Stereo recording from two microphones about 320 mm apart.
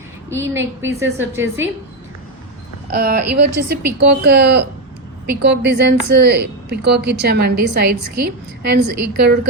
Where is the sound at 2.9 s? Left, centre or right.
Right.